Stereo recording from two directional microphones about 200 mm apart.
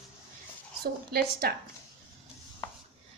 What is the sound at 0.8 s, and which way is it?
Speech, 50° right (ahead or behind).